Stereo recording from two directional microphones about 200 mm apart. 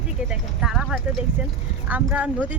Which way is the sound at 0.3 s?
5° right (ahead or behind).